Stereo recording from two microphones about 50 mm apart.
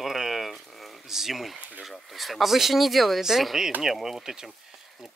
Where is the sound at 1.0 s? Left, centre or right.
Centre.